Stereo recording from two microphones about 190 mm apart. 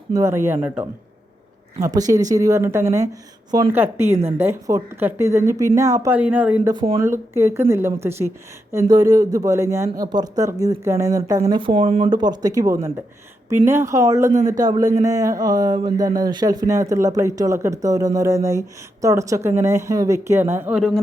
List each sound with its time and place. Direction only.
0.1 s a man's voice: 15° right (ahead or behind)
6.7 s speech: 35° right (ahead or behind)
7.0 s a man's voice: 15° right (ahead or behind); by 12.1 s 35° right (ahead or behind)
12.1 s a man's voice: 20° right (ahead or behind); by 21.0 s centre (ahead or behind)